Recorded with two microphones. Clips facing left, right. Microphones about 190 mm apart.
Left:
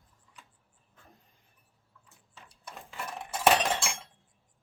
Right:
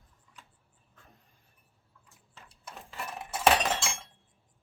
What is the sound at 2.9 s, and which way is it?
Cutlery, 5° right (ahead or behind).